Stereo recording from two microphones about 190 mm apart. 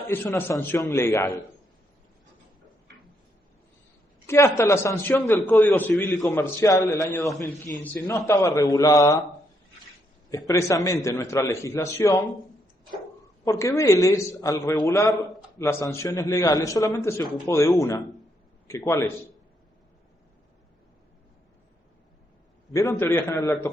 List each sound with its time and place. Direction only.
0.1 s a man's voice: 10° left (ahead or behind)
4.3 s a man's voice: 15° left (ahead or behind)
10.2 s a man's voice: 20° left (ahead or behind)
13.4 s a man's voice: 15° left (ahead or behind)
22.7 s a man's voice: 15° left (ahead or behind)